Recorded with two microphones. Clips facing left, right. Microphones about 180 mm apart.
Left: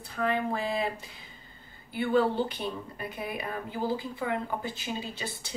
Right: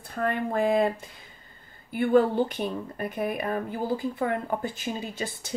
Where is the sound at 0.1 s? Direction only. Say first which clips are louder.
Right 2 dB; 50° right (ahead or behind).